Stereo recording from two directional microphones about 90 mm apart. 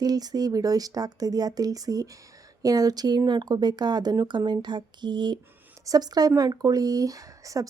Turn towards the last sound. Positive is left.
turn(degrees=-40)  # may be behind; listen again after turning